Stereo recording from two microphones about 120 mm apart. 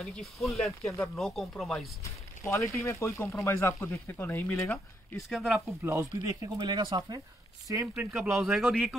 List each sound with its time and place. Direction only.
0.0 s speech: centre (ahead or behind)
2.0 s speech: 25° left (ahead or behind)
5.3 s speech: 5° right (ahead or behind)
5.8 s speech: 20° right (ahead or behind)
6.1 s speech: 30° right (ahead or behind)
7.9 s speech: 10° right (ahead or behind)
8.3 s speech: centre (ahead or behind)